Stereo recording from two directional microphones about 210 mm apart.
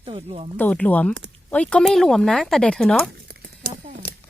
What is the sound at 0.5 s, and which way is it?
Speech, 5° left (ahead or behind).